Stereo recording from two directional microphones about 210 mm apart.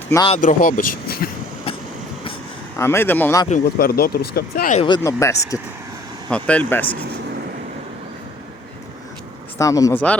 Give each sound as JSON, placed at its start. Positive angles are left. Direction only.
{"t": 0.3, "sound": "speech", "side_deg": 40}
{"t": 2.7, "sound": "speech", "side_deg": 10}
{"t": 3.5, "sound": "speech", "side_deg": 45}
{"t": 4.7, "sound": "speech", "side_deg": 25}
{"t": 5.0, "sound": "speech", "side_deg": 15}
{"t": 9.6, "sound": "speech", "side_deg": 15}